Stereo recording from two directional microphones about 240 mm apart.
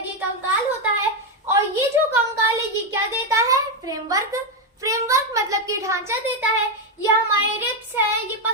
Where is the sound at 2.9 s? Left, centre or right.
Centre.